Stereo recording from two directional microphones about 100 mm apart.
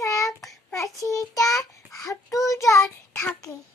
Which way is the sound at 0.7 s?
30° left (ahead or behind).